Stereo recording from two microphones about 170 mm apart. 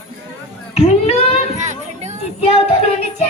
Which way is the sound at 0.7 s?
35° left (ahead or behind).